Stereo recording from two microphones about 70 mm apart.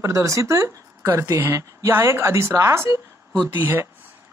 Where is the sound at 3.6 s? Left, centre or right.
Right.